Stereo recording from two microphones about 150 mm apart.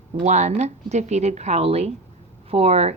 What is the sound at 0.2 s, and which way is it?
Speech, 50° right (ahead or behind).